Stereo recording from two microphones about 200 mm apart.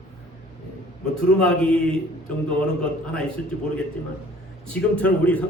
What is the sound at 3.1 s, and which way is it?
A man's voice, 5° left (ahead or behind).